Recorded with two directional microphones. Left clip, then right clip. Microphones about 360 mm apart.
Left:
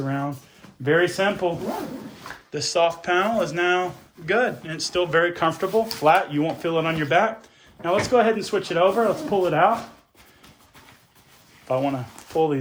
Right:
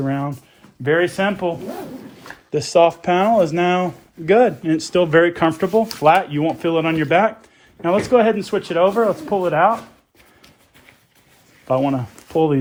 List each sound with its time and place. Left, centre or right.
0.0 s speech: centre
2.5 s speech: centre
11.7 s speech: centre